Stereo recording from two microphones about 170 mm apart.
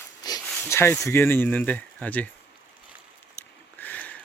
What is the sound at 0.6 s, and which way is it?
Speech, 15° left (ahead or behind).